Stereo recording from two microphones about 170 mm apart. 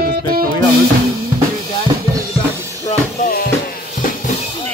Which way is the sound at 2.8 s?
55° left (ahead or behind).